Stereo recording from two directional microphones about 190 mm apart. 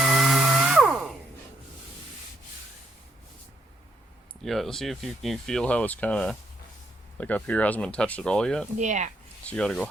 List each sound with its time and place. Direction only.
0.0 s a sound: centre (ahead or behind)
4.4 s speech: centre (ahead or behind)
8.8 s speech: 40° right (ahead or behind)
9.5 s speech: 5° left (ahead or behind)